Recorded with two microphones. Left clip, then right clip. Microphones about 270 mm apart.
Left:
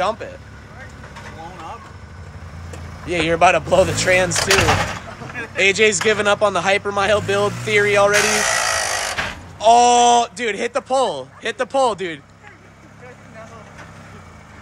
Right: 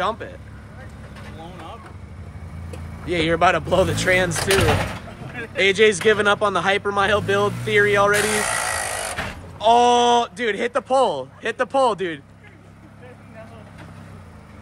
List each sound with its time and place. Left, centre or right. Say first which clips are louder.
0.0 s speech: left 3 dB; centre
3.1 s speech: left 3 dB; centre
5.6 s speech: left 1 dB; centre
8.6 s tools: left 5 dB; centre
9.6 s speech: left 3 dB; centre